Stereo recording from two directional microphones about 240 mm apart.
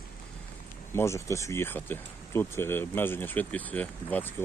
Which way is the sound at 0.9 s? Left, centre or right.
Centre.